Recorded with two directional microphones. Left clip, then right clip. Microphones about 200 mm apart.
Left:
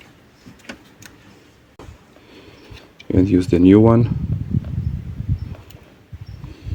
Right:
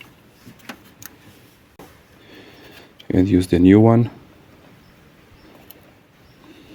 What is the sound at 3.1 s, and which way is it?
Speech, 10° right (ahead or behind).